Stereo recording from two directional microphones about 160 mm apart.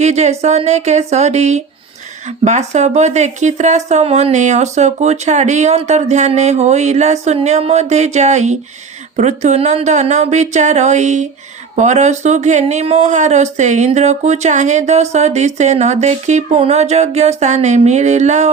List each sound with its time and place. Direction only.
0.0 s speech: 45° right (ahead or behind)